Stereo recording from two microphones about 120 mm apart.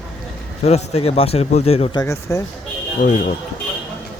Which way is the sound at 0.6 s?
65° left (ahead or behind).